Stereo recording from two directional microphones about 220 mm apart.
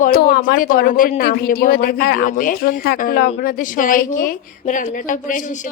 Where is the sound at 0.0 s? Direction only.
45° left (ahead or behind).